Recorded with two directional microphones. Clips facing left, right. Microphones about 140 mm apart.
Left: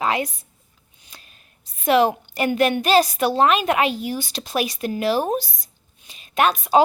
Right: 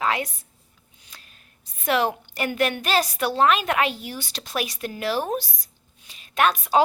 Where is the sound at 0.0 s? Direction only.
20° left (ahead or behind).